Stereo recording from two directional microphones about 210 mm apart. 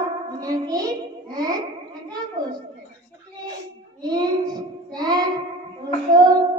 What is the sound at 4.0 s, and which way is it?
Child singing, 20° right (ahead or behind).